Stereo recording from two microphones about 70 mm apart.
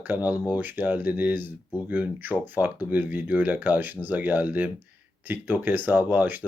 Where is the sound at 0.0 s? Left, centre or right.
Right.